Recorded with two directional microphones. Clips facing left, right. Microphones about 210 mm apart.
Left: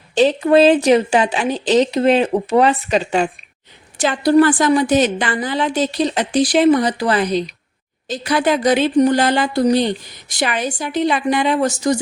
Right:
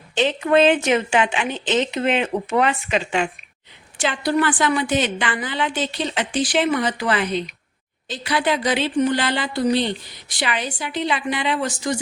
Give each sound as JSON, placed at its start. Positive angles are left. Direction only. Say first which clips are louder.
{"t": 0.1, "sound": "a woman's voice", "louder": "left 5 dB", "side_deg": 40}